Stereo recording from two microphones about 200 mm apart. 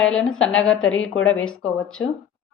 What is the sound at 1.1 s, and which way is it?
Speech, 85° left.